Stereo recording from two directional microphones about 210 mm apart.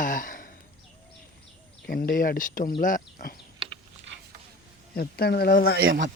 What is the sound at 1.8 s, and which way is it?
Speech, 45° left (ahead or behind).